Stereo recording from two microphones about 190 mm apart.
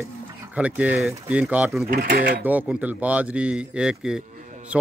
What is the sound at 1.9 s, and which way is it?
Speech, 50° right (ahead or behind).